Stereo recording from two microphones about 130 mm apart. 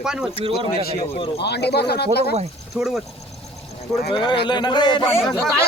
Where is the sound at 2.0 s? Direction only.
55° right (ahead or behind).